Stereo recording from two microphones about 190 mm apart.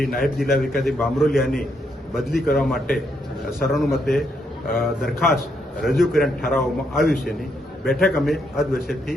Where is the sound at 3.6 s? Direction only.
Centre (ahead or behind).